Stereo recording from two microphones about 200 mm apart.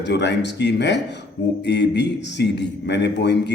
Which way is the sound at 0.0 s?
60° left (ahead or behind).